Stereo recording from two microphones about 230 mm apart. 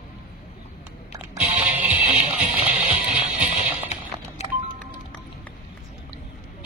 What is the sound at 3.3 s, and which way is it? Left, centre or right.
Music, right.